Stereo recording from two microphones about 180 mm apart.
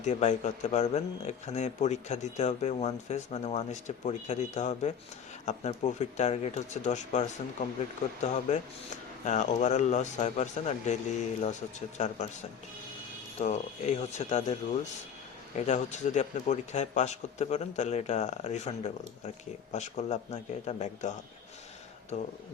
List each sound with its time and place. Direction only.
0.0 s speech: 40° left (ahead or behind)
11.9 s speech: 40° left (ahead or behind)
22.1 s speech: 40° left (ahead or behind)